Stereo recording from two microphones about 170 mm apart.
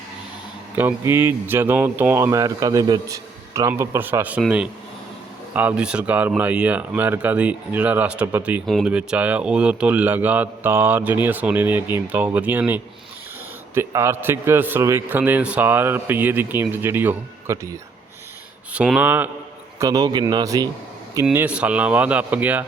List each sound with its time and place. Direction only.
0.8 s a man's voice: 10° right (ahead or behind)
18.7 s a man's voice: 5° right (ahead or behind)
19.8 s speech: 20° right (ahead or behind)
21.3 s a man's voice: 5° right (ahead or behind)